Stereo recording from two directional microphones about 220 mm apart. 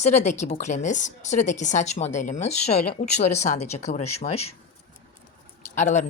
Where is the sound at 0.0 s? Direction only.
30° left (ahead or behind).